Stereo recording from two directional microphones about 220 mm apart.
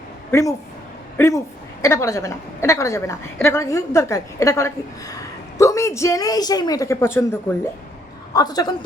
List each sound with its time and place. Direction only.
0.3 s a woman's voice: 15° left (ahead or behind)
8.3 s a woman's voice: 15° left (ahead or behind)